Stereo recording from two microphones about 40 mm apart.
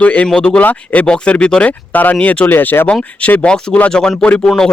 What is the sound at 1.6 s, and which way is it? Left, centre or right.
Speech, left.